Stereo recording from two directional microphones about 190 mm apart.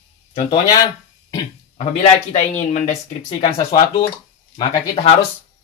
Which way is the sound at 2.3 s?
40° left (ahead or behind).